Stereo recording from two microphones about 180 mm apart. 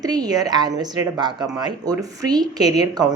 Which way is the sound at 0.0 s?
20° right (ahead or behind).